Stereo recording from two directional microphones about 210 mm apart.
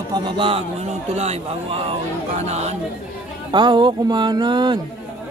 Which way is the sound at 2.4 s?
30° right (ahead or behind).